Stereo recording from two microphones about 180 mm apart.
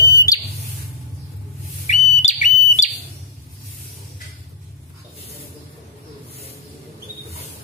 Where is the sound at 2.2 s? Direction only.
40° left (ahead or behind).